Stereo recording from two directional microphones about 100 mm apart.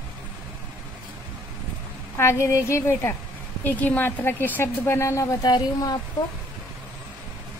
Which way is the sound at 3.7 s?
15° left (ahead or behind).